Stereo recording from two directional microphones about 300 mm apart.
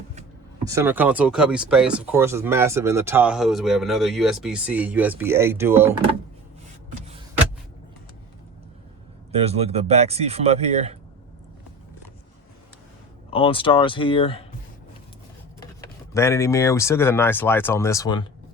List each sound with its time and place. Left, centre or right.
0.6 s speech: centre
9.3 s speech: centre
13.3 s speech: centre
16.1 s speech: centre